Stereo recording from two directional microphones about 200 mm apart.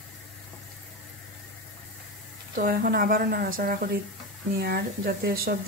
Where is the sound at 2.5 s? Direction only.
45° right (ahead or behind).